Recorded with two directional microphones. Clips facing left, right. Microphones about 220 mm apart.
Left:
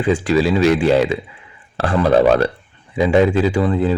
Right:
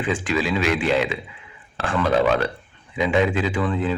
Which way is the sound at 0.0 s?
40° left (ahead or behind).